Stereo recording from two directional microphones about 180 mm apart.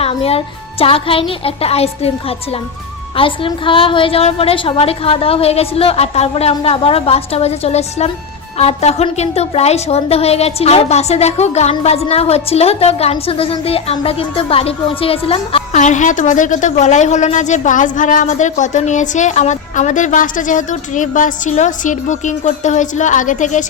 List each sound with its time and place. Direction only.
0.0 s a woman's voice: 35° left (ahead or behind)
3.2 s a woman's voice: 30° left (ahead or behind); by 23.6 s 45° left (ahead or behind)